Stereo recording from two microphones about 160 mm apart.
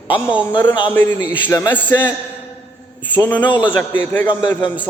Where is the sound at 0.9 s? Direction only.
15° left (ahead or behind).